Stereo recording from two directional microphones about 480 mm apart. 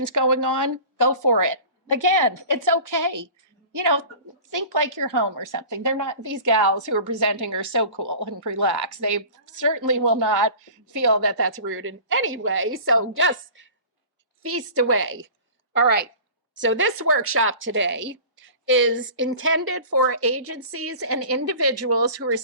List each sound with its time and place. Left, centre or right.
0.0 s a woman's voice: right